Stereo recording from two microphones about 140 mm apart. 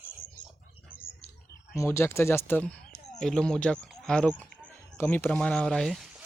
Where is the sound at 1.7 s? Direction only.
20° left (ahead or behind); by 6.1 s centre (ahead or behind).